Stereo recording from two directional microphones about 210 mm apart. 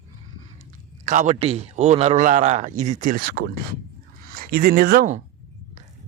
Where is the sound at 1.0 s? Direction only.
35° right (ahead or behind).